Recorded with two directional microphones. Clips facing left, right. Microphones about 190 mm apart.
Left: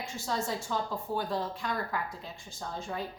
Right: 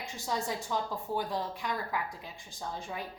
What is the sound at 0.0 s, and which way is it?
A woman's voice, 15° right (ahead or behind).